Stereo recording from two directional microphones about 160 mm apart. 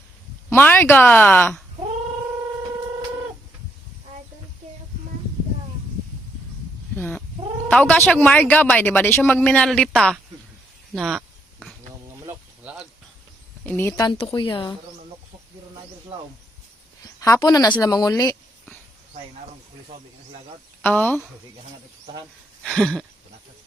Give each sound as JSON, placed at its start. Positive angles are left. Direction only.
{"t": 0.5, "sound": "speech", "side_deg": 10}
{"t": 6.9, "sound": "speech", "side_deg": 10}
{"t": 12.1, "sound": "insect", "side_deg": -15}
{"t": 13.7, "sound": "speech", "side_deg": 15}
{"t": 13.9, "sound": "speech", "side_deg": 25}
{"t": 17.2, "sound": "speech", "side_deg": 25}
{"t": 20.8, "sound": "speech", "side_deg": 10}
{"t": 22.6, "sound": "a sound", "side_deg": 5}